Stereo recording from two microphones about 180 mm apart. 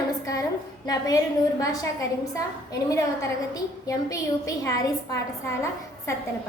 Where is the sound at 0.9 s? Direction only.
20° left (ahead or behind).